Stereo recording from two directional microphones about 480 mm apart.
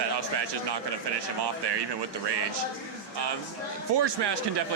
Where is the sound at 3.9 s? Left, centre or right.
Right.